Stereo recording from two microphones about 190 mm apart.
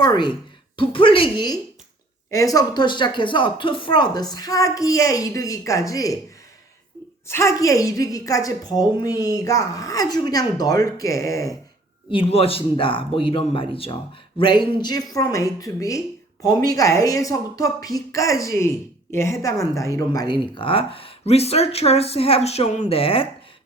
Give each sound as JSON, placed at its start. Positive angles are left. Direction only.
{"t": 0.0, "sound": "speech", "side_deg": 20}
{"t": 7.3, "sound": "speech", "side_deg": 15}
{"t": 12.1, "sound": "speech", "side_deg": 30}